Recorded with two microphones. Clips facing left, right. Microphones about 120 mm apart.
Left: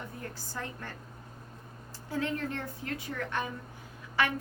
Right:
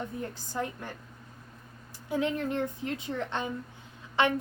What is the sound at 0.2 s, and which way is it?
Speech, 20° right (ahead or behind).